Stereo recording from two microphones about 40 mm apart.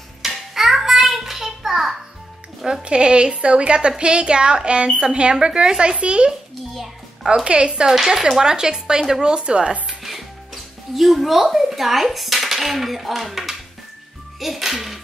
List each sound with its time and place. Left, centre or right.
0.2 s child singing: centre
2.6 s speech: right
7.4 s speech: right
7.9 s speech: centre
9.2 s speech: right
10.0 s speech: centre
14.4 s music: centre